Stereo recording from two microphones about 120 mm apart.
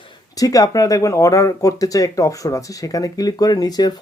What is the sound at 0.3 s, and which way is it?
Speech, 30° left (ahead or behind).